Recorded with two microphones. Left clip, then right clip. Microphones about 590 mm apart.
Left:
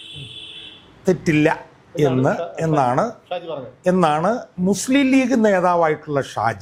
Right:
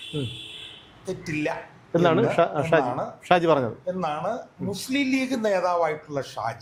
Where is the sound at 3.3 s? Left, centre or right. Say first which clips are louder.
Right 8 dB; right.